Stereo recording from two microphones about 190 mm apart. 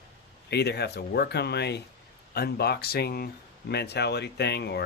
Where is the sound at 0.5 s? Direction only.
60° left (ahead or behind).